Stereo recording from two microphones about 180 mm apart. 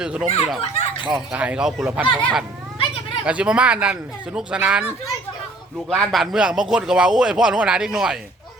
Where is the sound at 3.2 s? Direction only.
5° right (ahead or behind).